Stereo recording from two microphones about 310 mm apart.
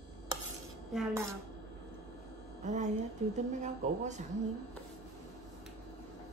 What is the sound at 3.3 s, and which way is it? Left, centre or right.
Speech, right.